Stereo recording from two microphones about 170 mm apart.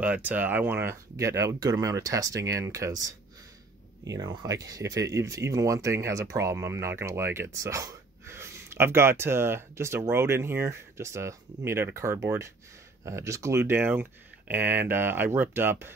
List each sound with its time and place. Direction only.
0.0 s speech: 10° right (ahead or behind)